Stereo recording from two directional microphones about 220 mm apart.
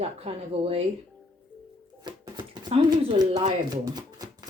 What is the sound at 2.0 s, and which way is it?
Speech, 20° right (ahead or behind).